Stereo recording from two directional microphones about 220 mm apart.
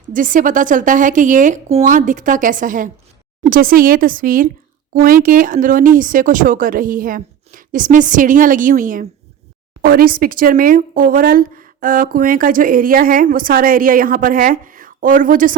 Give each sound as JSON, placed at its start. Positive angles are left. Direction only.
{"t": 0.1, "sound": "speech", "side_deg": -35}